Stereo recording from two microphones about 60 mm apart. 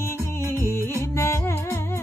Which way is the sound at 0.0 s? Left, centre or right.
Left.